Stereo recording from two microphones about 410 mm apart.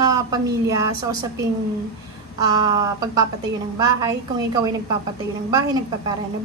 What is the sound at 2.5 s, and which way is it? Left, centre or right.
A woman's voice, centre.